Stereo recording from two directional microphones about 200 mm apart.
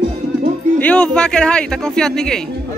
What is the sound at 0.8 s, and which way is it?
Speech, 5° left (ahead or behind).